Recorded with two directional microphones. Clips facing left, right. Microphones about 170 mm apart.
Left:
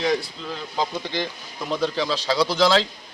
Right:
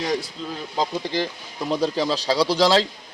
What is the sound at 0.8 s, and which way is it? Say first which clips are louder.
Speech: right 2 dB; 35° right (ahead or behind).